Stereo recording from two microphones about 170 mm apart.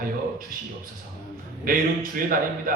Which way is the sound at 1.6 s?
55° right (ahead or behind).